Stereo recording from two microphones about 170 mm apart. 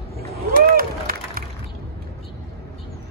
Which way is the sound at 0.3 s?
60° right (ahead or behind).